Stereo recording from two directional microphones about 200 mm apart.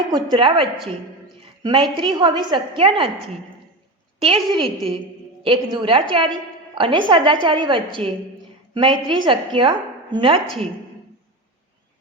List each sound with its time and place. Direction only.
0.1 s a woman's voice: 25° right (ahead or behind)
4.2 s a woman's voice: 30° right (ahead or behind)